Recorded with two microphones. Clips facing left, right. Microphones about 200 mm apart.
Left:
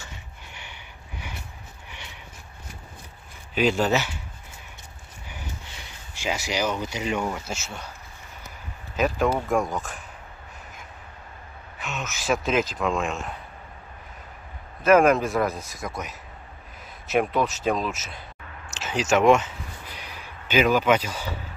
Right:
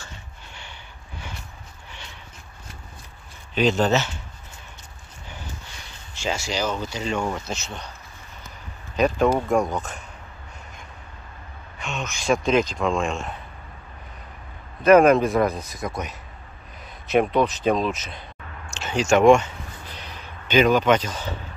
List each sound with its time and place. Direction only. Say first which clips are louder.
1.9 s a sound: right 1 dB; 15° left (ahead or behind)
3.5 s speech: right 2 dB; 10° left (ahead or behind)
6.1 s speech: right 1 dB; 15° left (ahead or behind)
8.9 s a man's voice: right 3 dB; 5° left (ahead or behind)
11.8 s a man's voice: right 2 dB; 5° left (ahead or behind)
14.8 s a man's voice: right 3 dB; centre (ahead or behind)
18.7 s a sound: right 3 dB; 5° left (ahead or behind)